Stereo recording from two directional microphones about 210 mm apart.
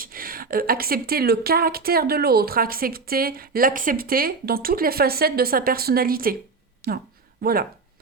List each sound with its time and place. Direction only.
0.0 s speech: 45° right (ahead or behind)